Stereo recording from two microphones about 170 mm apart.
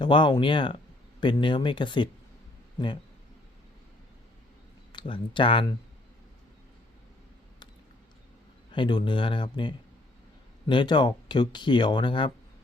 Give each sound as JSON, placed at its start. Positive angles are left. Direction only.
{"t": 0.0, "sound": "a man's voice", "side_deg": 25}
{"t": 4.9, "sound": "speech", "side_deg": 30}
{"t": 8.7, "sound": "speech", "side_deg": 25}